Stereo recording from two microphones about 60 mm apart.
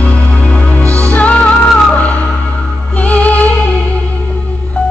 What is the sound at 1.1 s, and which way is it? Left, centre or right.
Music, left.